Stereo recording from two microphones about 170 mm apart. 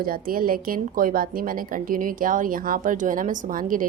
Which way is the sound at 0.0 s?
60° right (ahead or behind).